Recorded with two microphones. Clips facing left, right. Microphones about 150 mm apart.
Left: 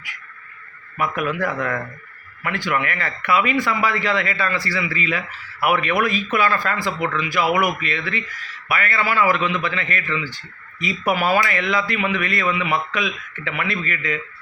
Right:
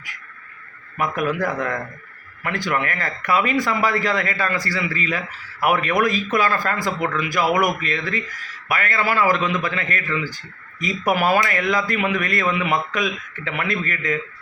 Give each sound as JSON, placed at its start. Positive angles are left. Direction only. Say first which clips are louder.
{"t": 0.9, "sound": "a man's voice", "louder": "right 1 dB", "side_deg": -40}